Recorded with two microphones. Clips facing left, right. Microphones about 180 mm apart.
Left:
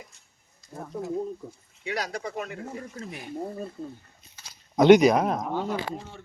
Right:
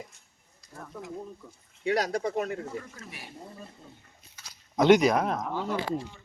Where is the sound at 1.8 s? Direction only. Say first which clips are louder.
Right 5 dB; 40° right (ahead or behind).